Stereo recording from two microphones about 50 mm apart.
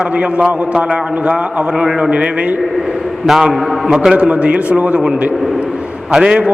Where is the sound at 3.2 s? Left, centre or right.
Centre.